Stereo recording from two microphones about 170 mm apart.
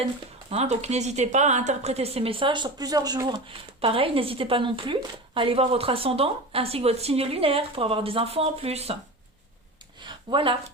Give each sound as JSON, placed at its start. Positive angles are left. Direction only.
{"t": 0.5, "sound": "speech", "side_deg": -40}
{"t": 3.8, "sound": "speech", "side_deg": -35}
{"t": 10.0, "sound": "a sound", "side_deg": -25}